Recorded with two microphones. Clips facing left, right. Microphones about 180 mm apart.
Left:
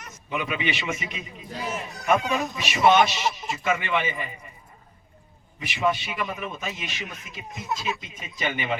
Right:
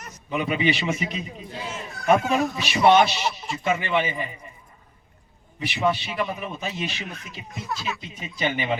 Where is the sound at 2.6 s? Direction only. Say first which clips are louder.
Right 1 dB; 35° right (ahead or behind).